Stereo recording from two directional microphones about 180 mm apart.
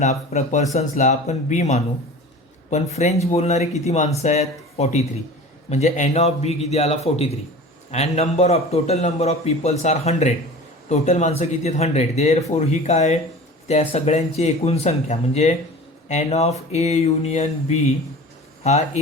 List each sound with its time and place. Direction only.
0.0 s a man's voice: 40° left (ahead or behind)